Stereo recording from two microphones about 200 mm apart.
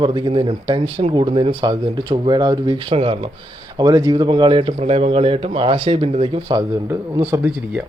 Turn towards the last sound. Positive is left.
turn(degrees=-10)  # may be behind; listen again after turning